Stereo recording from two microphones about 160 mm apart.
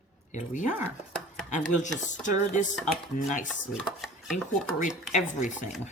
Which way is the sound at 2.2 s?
50° left (ahead or behind).